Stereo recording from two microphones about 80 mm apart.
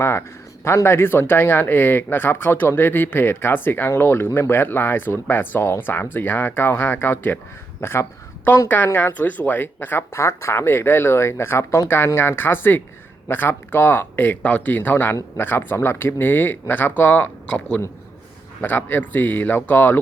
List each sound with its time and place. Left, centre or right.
0.6 s speech: left